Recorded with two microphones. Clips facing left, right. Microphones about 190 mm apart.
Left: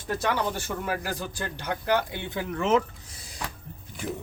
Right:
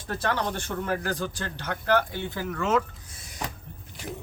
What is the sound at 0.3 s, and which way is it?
Speech, 10° left (ahead or behind).